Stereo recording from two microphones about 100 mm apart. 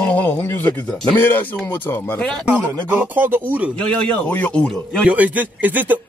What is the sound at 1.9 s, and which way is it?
Speech, 15° left (ahead or behind).